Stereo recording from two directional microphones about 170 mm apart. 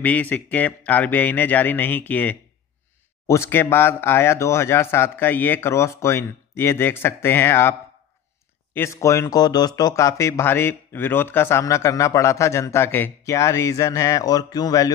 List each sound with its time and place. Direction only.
0.0 s speech: 10° left (ahead or behind)
8.7 s speech: 15° left (ahead or behind)